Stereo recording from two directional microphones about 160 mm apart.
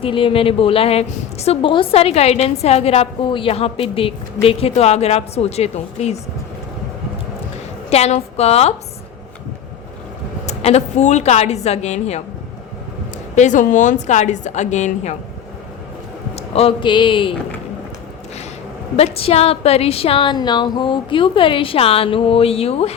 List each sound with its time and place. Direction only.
0.0 s a woman's voice: 35° left (ahead or behind)
7.9 s a woman's voice: 40° left (ahead or behind)
10.4 s a woman's voice: 40° left (ahead or behind)
13.3 s a woman's voice: 50° left (ahead or behind)
16.3 s speech: 40° left (ahead or behind)
18.9 s a woman's voice: 40° left (ahead or behind)